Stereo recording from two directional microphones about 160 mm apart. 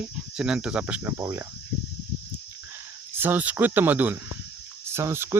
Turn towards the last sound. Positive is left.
turn(degrees=-15)  # may be behind; listen again after turning